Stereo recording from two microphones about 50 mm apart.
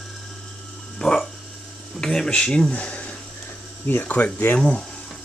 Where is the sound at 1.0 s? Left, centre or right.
Left.